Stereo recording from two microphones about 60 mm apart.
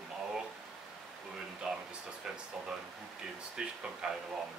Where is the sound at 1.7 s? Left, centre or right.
Centre.